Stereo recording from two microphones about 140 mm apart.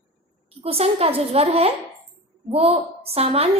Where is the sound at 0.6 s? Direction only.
45° right (ahead or behind).